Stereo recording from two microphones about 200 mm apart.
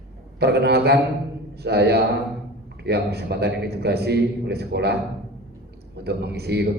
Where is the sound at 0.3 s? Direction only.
55° right (ahead or behind).